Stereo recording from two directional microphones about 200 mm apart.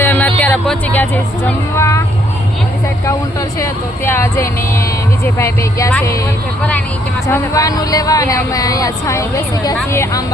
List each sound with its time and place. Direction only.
0.0 s speech: 10° left (ahead or behind)
3.6 s speech: 15° left (ahead or behind)